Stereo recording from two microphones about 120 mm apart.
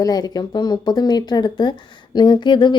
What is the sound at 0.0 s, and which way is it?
Speech, 35° left (ahead or behind).